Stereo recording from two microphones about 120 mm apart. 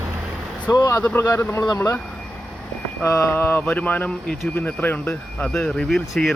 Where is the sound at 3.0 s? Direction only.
20° left (ahead or behind); by 6.3 s centre (ahead or behind).